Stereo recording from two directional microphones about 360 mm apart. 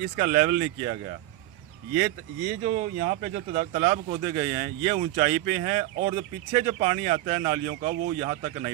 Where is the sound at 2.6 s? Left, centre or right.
Centre.